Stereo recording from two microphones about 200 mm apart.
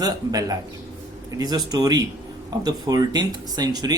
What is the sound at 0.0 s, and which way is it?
Speech, 20° right (ahead or behind).